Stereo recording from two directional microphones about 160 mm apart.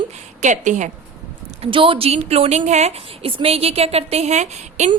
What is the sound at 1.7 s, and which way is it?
A woman's voice, 35° right (ahead or behind).